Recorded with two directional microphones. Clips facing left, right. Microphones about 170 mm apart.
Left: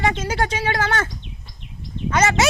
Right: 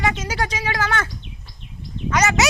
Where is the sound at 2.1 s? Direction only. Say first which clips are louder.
Left 1 dB; 25° left (ahead or behind).